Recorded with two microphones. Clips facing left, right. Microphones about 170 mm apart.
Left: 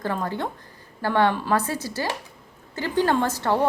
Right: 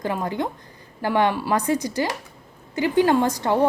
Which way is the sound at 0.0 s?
15° right (ahead or behind).